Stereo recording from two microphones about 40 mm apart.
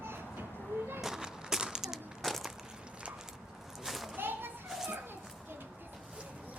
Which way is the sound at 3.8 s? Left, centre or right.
Centre.